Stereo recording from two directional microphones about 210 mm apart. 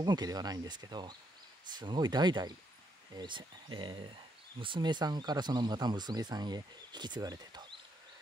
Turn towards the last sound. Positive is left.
turn(degrees=-20)  # may be behind; listen again after turning